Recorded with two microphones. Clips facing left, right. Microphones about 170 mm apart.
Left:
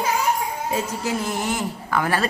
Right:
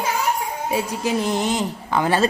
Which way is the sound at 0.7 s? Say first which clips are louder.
Right 4 dB; 15° right (ahead or behind).